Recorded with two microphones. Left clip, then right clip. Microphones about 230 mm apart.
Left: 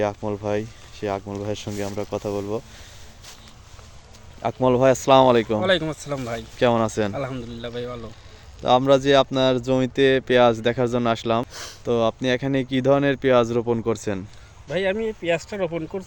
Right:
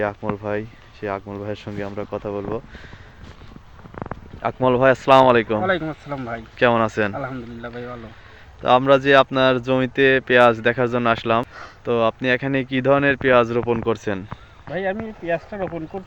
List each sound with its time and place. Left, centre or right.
0.0 s speech: centre
4.4 s speech: centre
5.6 s speech: left
6.6 s speech: centre
14.7 s speech: left